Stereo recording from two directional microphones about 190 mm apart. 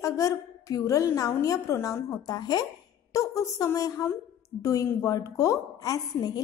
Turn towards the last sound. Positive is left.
turn(degrees=20)  # may be behind; listen again after turning